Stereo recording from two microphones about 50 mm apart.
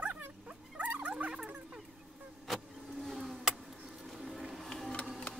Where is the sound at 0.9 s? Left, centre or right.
Right.